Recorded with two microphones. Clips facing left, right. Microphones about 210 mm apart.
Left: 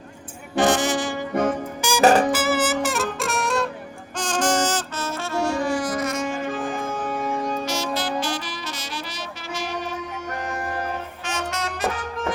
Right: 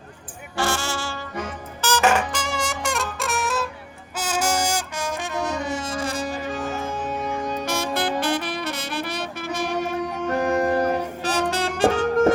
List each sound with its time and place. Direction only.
0.5 s brass instrument: 20° left (ahead or behind)
1.3 s music: 55° left (ahead or behind)
2.0 s music: 35° left (ahead or behind)
2.3 s music: 5° left (ahead or behind)
4.2 s brass instrument: 10° right (ahead or behind); by 6.4 s 35° right (ahead or behind)
7.1 s music: 5° left (ahead or behind)
7.6 s saxophone: 55° right (ahead or behind)
10.2 s music: 35° right (ahead or behind)